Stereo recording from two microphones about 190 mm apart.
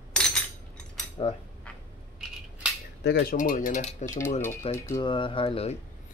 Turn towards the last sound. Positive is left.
turn(degrees=30)  # may be behind; listen again after turning